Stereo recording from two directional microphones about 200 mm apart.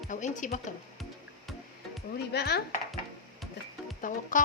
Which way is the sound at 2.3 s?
55° left (ahead or behind).